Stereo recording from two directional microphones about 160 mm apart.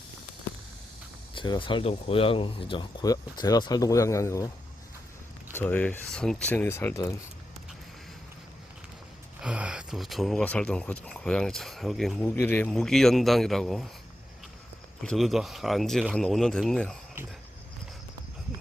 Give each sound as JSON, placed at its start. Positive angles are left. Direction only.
{"t": 1.3, "sound": "speech", "side_deg": 30}
{"t": 5.5, "sound": "speech", "side_deg": 10}
{"t": 9.4, "sound": "speech", "side_deg": -5}
{"t": 12.2, "sound": "speech", "side_deg": 15}
{"t": 15.0, "sound": "speech", "side_deg": 0}